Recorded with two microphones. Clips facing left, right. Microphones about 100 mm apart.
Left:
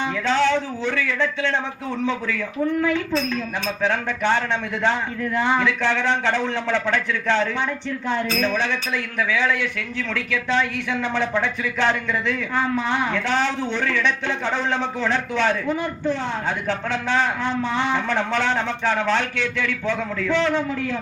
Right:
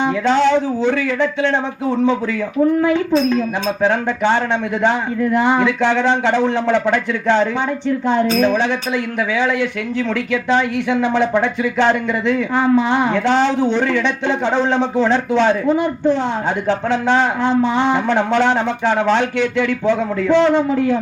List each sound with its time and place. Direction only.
0.0 s a man's voice: 20° right (ahead or behind)